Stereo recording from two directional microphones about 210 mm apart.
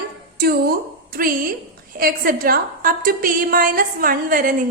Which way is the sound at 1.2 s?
40° right (ahead or behind).